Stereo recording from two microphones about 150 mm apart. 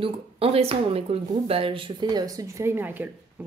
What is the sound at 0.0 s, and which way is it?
Speech, 40° right (ahead or behind).